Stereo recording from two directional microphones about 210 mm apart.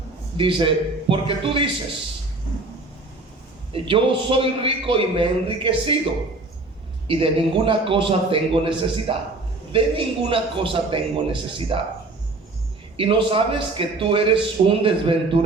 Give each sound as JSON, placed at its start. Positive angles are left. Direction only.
{"t": 0.3, "sound": "a man's voice", "side_deg": -25}
{"t": 3.7, "sound": "a man's voice", "side_deg": -25}
{"t": 7.1, "sound": "a man's voice", "side_deg": -25}
{"t": 13.0, "sound": "a man's voice", "side_deg": -25}